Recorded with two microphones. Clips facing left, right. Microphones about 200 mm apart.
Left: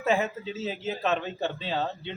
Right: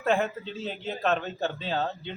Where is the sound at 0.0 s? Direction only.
5° left (ahead or behind).